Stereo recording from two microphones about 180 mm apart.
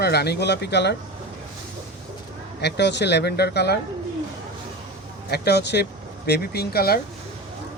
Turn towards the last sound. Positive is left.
turn(degrees=60)  # may be behind; listen again after turning